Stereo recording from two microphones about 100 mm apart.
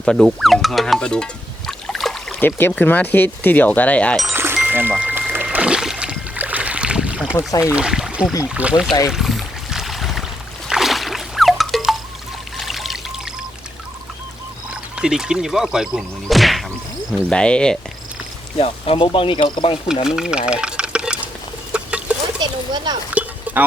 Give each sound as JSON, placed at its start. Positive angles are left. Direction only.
{"t": 0.0, "sound": "music", "side_deg": 5}
{"t": 2.4, "sound": "speech", "side_deg": 20}
{"t": 4.3, "sound": "music", "side_deg": -25}
{"t": 7.6, "sound": "speech", "side_deg": -10}
{"t": 9.0, "sound": "a sound", "side_deg": -5}
{"t": 12.5, "sound": "pour", "side_deg": 0}
{"t": 14.7, "sound": "speech", "side_deg": -10}
{"t": 18.6, "sound": "speech", "side_deg": 65}
{"t": 20.1, "sound": "speech", "side_deg": -5}
{"t": 21.7, "sound": "a sound", "side_deg": -10}
{"t": 22.4, "sound": "a sound", "side_deg": -45}
{"t": 23.2, "sound": "a sound", "side_deg": -15}